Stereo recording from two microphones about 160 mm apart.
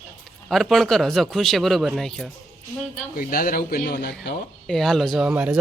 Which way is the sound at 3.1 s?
65° left (ahead or behind).